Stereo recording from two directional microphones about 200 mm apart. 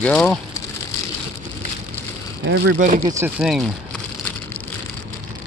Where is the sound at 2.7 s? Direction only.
40° right (ahead or behind).